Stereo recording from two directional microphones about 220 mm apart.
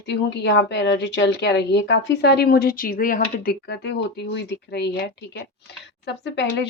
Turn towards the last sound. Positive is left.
turn(degrees=50)  # may be behind; listen again after turning